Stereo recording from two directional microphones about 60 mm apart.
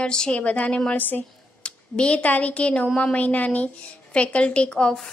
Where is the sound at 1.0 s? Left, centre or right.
Left.